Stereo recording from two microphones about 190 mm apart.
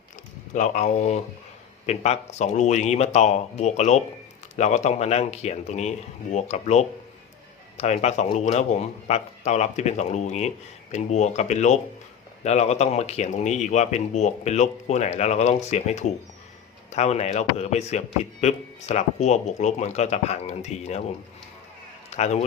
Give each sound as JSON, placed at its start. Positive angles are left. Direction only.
{"t": 0.5, "sound": "speech", "side_deg": 40}
{"t": 22.1, "sound": "a man's voice", "side_deg": 35}